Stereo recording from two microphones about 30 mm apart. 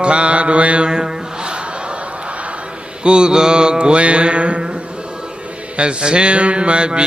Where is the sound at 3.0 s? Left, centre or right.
Right.